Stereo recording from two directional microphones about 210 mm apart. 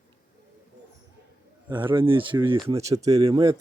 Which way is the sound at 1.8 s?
25° right (ahead or behind).